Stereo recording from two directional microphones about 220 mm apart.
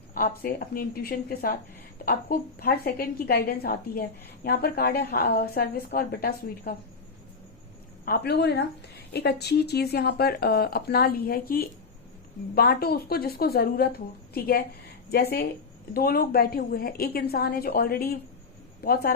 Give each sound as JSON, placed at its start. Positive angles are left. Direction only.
{"t": 0.1, "sound": "a woman's voice", "side_deg": 40}
{"t": 8.0, "sound": "a woman's voice", "side_deg": 45}